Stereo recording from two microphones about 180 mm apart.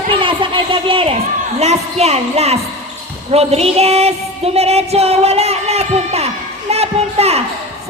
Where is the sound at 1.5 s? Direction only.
35° right (ahead or behind).